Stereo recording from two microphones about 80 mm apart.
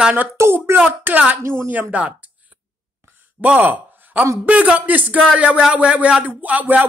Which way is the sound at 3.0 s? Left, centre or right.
Centre.